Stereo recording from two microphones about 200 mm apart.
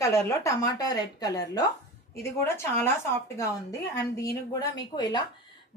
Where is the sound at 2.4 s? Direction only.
10° left (ahead or behind).